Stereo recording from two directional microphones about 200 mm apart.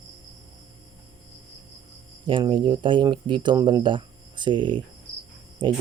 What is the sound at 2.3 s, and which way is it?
Speech, 25° right (ahead or behind).